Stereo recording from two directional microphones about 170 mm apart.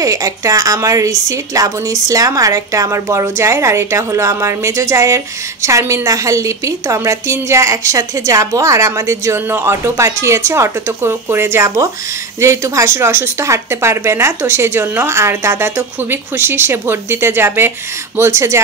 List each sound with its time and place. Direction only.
0.0 s a woman's voice: 20° right (ahead or behind)